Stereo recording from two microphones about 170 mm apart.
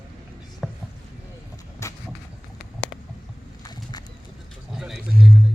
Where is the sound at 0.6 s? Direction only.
5° left (ahead or behind).